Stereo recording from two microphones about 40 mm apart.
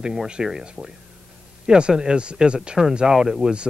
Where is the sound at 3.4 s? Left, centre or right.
Right.